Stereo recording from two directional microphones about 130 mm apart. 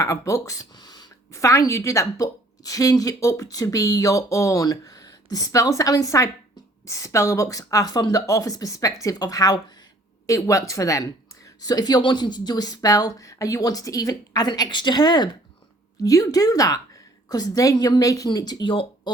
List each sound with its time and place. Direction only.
0.0 s speech: 25° left (ahead or behind); by 19.1 s 40° left (ahead or behind)